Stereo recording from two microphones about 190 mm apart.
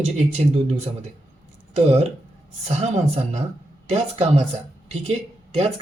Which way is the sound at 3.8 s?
35° right (ahead or behind).